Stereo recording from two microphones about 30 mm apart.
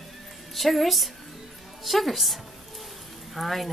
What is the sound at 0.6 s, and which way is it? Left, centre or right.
Speech, centre.